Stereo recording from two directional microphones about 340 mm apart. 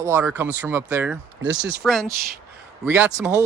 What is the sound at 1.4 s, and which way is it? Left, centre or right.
Speech, right.